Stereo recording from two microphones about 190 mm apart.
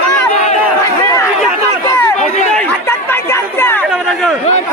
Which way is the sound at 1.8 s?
15° left (ahead or behind).